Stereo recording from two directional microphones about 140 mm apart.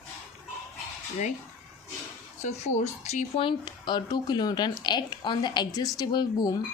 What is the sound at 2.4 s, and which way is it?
Speech, 55° left (ahead or behind).